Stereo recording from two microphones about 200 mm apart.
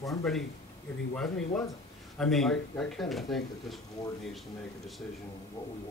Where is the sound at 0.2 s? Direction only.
Centre (ahead or behind).